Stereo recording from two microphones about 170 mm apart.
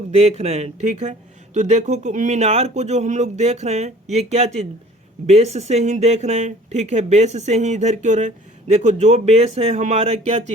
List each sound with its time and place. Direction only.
0.1 s speech: 40° right (ahead or behind)